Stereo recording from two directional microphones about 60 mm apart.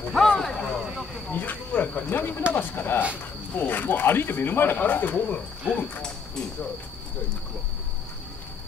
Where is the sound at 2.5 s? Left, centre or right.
Left.